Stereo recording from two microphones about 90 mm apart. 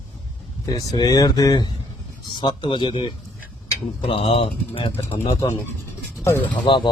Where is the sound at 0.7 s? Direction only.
45° left (ahead or behind).